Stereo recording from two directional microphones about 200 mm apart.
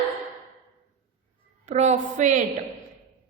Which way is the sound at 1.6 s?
35° right (ahead or behind).